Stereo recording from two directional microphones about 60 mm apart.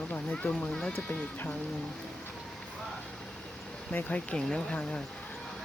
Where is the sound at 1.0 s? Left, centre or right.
Left.